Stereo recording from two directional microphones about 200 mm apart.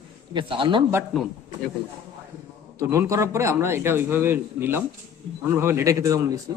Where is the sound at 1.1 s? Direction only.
Centre (ahead or behind).